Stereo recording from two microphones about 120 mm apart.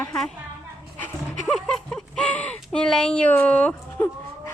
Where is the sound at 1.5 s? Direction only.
Centre (ahead or behind).